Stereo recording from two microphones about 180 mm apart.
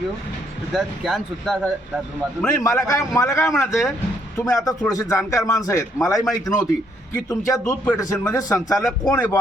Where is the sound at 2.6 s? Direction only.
15° left (ahead or behind).